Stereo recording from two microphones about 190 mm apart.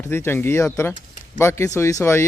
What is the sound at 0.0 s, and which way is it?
A man's voice, 15° left (ahead or behind).